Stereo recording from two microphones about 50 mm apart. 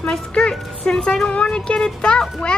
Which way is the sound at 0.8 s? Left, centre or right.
Centre.